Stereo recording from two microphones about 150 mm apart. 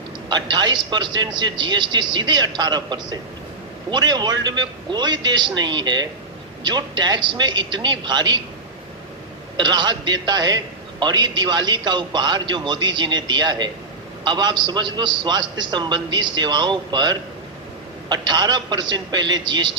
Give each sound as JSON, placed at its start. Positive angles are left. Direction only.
{"t": 0.3, "sound": "a man's voice", "side_deg": -30}
{"t": 9.6, "sound": "a man's voice", "side_deg": -30}